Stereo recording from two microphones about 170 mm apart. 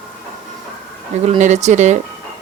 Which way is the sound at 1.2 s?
40° right (ahead or behind).